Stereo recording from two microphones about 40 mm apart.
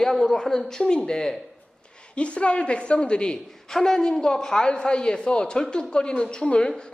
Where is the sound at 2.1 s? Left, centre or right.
Left.